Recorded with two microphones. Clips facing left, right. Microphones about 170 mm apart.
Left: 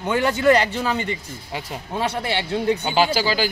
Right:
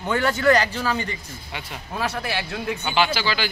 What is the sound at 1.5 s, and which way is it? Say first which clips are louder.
Speech: left 4 dB; 35° left (ahead or behind).